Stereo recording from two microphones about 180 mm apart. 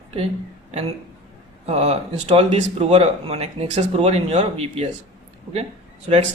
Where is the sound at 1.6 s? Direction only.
35° right (ahead or behind).